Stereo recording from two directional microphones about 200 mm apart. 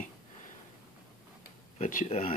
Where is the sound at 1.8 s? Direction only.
45° left (ahead or behind).